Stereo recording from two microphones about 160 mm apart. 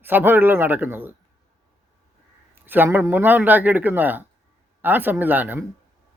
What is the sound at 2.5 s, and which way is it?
Speech, 10° right (ahead or behind).